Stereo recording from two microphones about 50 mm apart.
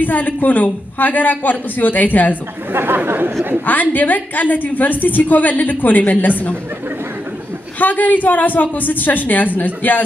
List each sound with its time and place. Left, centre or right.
0.0 s a woman's voice: left
2.7 s speech: right
3.6 s a woman's voice: left
7.8 s a woman's voice: left